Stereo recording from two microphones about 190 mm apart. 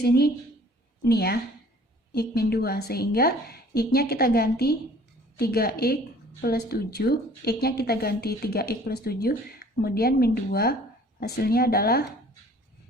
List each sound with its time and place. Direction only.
0.0 s speech: 55° left (ahead or behind)